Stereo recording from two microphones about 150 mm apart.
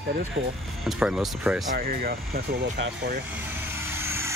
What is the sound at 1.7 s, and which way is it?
Speech, 85° right.